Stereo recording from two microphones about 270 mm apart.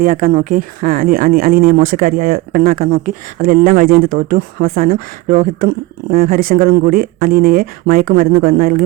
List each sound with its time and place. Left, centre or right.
0.0 s speech: right